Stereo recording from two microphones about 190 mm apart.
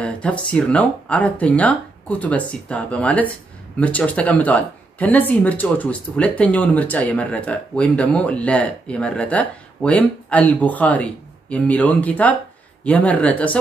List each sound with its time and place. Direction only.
0.0 s speech: 5° left (ahead or behind)